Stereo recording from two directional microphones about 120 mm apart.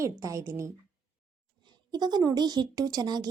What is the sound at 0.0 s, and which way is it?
Speech, 25° right (ahead or behind).